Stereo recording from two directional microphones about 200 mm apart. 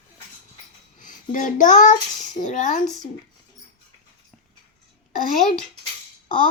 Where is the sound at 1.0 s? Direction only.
40° left (ahead or behind).